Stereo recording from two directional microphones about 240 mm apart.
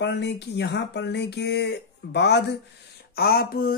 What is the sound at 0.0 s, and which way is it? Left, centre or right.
Speech, left.